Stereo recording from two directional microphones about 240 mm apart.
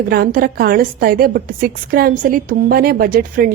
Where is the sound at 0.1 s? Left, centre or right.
Right.